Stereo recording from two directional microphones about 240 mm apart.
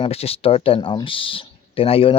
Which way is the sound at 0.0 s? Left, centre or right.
Left.